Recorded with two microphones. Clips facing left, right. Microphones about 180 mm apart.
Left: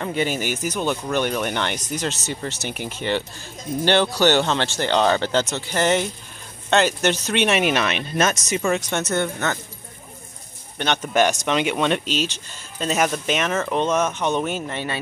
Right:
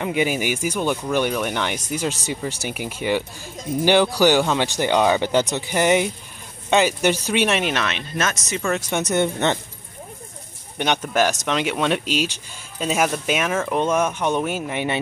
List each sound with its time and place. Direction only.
0.0 s speech: 10° right (ahead or behind)
7.5 s speech: 10° left (ahead or behind)
8.9 s speech: 15° right (ahead or behind)
11.1 s speech: centre (ahead or behind)